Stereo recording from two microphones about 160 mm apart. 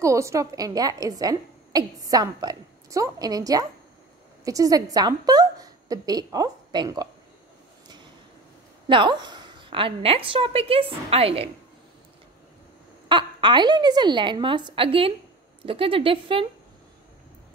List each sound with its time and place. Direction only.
0.0 s a woman's voice: 20° right (ahead or behind)
8.8 s a woman's voice: 30° right (ahead or behind)
13.1 s a woman's voice: 30° right (ahead or behind)